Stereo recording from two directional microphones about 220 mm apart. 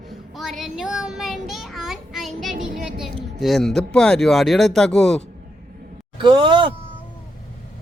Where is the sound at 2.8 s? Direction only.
Centre (ahead or behind).